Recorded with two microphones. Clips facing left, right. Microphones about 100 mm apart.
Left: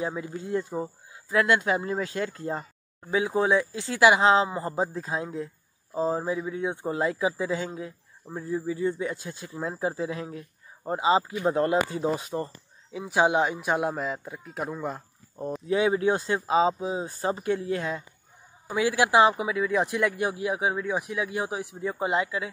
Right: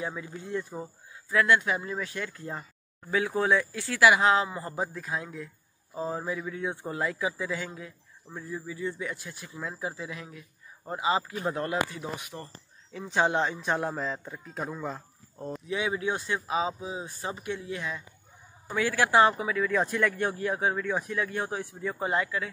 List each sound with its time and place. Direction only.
0.0 s speech: 30° left (ahead or behind)
3.1 s speech: 20° left (ahead or behind)
8.9 s speech: 25° left (ahead or behind)
12.9 s speech: 10° left (ahead or behind)
15.6 s speech: 40° left (ahead or behind)
18.8 s speech: 15° left (ahead or behind)